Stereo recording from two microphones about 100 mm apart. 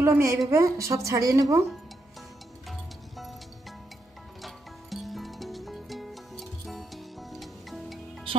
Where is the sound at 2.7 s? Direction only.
Centre (ahead or behind).